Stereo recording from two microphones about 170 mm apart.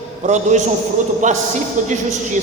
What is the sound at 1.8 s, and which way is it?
Speech, 45° right (ahead or behind).